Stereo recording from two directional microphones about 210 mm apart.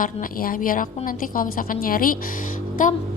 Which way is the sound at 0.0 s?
40° left (ahead or behind).